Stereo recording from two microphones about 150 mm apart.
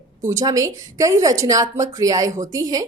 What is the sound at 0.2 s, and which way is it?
A woman's voice, 20° right (ahead or behind).